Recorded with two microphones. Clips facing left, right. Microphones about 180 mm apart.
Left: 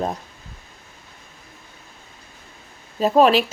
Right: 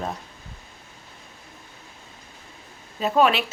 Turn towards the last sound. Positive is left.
turn(degrees=35)  # may be behind; listen again after turning